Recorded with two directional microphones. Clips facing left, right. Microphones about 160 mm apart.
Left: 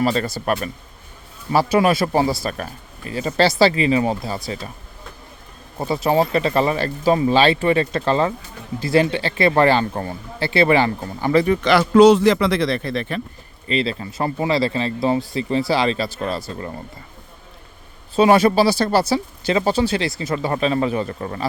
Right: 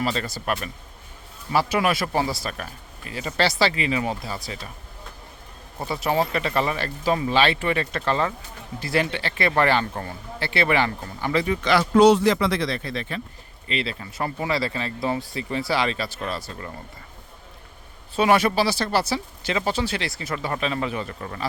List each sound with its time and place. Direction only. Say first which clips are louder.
0.0 s speech: left 6 dB; 45° left (ahead or behind)
1.5 s speech: left 5 dB; 30° left (ahead or behind)
5.8 s speech: left 5 dB; 25° left (ahead or behind); by 13.2 s 60° left (ahead or behind)
13.7 s speech: left 7 dB; 30° left (ahead or behind)
18.2 s speech: left 6 dB; 30° left (ahead or behind)